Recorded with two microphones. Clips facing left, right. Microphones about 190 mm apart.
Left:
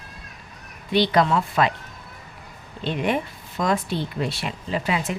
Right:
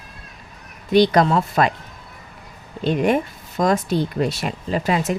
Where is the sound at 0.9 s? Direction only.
45° right (ahead or behind).